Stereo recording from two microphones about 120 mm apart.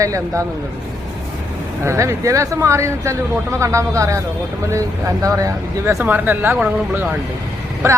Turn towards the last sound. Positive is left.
turn(degrees=-25)  # may be behind; listen again after turning